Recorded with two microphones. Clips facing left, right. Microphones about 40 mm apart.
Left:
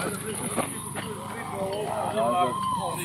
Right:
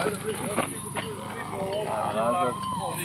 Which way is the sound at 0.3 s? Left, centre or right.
Centre.